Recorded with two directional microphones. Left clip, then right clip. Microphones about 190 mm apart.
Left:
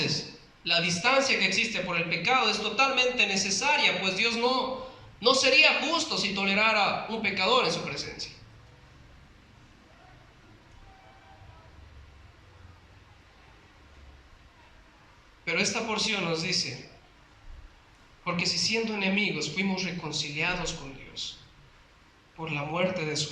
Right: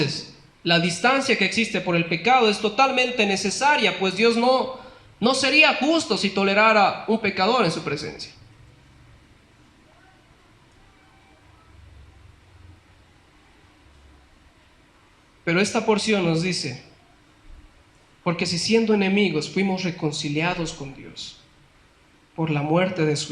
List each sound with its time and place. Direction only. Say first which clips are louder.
0.6 s speech: right 6 dB; 45° right (ahead or behind)
15.4 s speech: right 7 dB; 45° right (ahead or behind)
18.3 s speech: right 5 dB; 45° right (ahead or behind)
22.4 s speech: right 8 dB; 45° right (ahead or behind)